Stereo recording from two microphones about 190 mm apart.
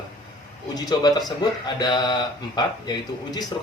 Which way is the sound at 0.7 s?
20° left (ahead or behind).